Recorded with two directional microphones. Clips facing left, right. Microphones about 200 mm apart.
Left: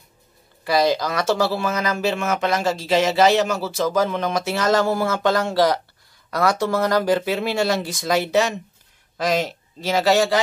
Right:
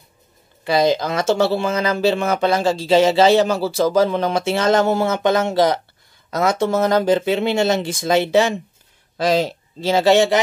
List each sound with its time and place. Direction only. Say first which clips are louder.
0.7 s speech: right 2 dB; 25° right (ahead or behind)